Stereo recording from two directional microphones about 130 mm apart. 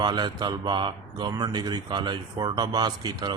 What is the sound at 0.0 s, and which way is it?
A man's voice, 35° right (ahead or behind).